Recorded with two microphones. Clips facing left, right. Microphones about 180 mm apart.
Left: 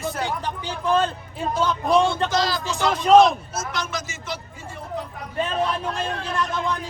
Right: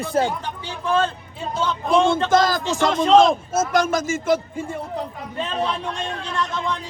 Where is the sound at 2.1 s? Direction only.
50° right (ahead or behind).